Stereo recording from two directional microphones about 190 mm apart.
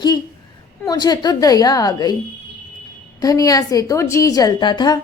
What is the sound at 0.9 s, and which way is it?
A woman's voice, 20° left (ahead or behind).